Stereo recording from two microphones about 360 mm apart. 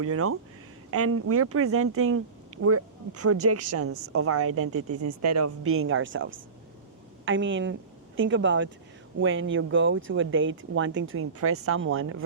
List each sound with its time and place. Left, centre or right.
0.0 s a woman's voice: right